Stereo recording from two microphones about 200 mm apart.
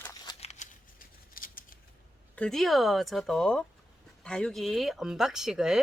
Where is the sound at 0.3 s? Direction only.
35° left (ahead or behind).